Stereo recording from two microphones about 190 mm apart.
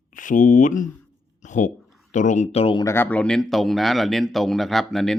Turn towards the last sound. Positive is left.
turn(degrees=0)  # may be behind; listen again after turning